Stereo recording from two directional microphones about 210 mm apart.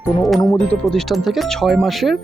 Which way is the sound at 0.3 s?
15° left (ahead or behind).